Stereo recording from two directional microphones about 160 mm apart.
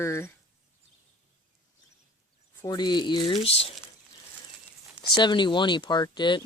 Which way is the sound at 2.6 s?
25° left (ahead or behind).